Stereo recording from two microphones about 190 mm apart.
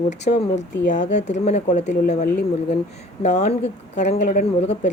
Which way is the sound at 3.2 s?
35° left (ahead or behind).